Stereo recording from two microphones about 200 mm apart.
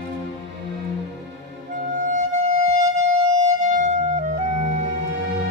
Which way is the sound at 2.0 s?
40° right (ahead or behind).